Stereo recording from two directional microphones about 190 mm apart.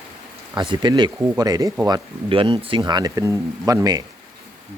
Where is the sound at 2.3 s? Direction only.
25° right (ahead or behind).